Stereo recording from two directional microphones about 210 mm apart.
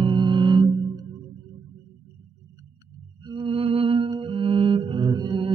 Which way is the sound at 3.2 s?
25° right (ahead or behind).